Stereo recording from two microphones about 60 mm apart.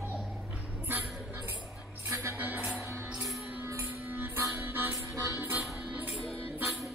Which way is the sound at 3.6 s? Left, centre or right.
Right.